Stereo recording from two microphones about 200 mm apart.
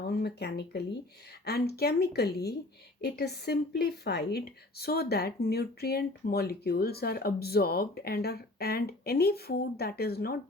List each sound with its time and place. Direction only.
0.1 s speech: 55° left (ahead or behind)